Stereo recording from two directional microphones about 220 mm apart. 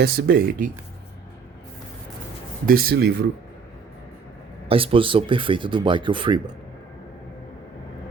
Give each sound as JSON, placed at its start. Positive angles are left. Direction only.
{"t": 0.0, "sound": "speech", "side_deg": -45}
{"t": 2.6, "sound": "speech", "side_deg": -45}
{"t": 4.7, "sound": "speech", "side_deg": -25}